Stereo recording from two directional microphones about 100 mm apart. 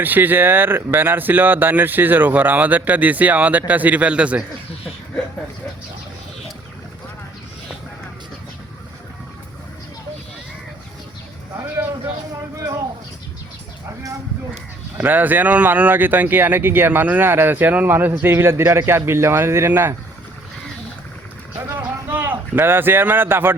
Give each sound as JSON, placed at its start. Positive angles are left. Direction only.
{"t": 0.0, "sound": "a man's voice", "side_deg": -20}
{"t": 14.9, "sound": "speech", "side_deg": -20}
{"t": 21.8, "sound": "a sound", "side_deg": -20}